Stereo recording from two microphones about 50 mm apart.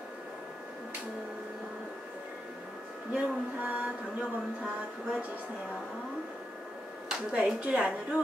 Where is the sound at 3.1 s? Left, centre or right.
Right.